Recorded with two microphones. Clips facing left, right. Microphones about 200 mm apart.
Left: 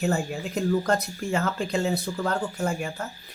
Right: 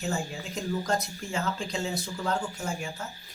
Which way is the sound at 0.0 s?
60° left (ahead or behind).